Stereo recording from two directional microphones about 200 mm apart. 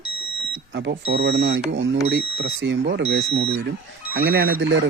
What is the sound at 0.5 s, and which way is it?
Smoke detector, 60° right (ahead or behind).